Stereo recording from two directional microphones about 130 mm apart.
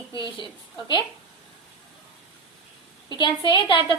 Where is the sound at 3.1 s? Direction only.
35° left (ahead or behind).